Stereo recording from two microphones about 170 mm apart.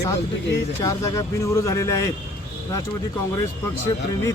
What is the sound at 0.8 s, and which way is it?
Speech, 20° left (ahead or behind).